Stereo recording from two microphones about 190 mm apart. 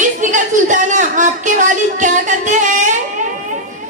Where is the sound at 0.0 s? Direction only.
40° right (ahead or behind).